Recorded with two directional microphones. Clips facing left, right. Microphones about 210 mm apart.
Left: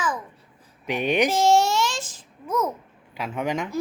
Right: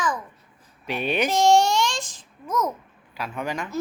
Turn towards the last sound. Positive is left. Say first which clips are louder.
# left 3 dB
turn(degrees=20)  # may be behind; listen again after turning